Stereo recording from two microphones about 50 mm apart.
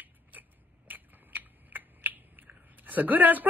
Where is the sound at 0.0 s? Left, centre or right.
Right.